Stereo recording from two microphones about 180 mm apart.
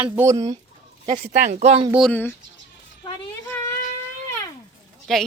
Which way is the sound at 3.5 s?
10° left (ahead or behind).